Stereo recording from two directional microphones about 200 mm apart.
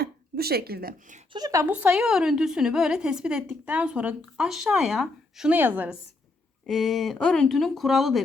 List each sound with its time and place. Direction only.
0.0 s speech: 50° right (ahead or behind)
1.3 s a woman's voice: 20° right (ahead or behind); by 8.2 s centre (ahead or behind)